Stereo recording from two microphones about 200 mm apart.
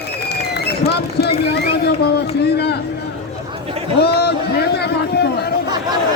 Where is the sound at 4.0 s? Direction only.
55° left (ahead or behind).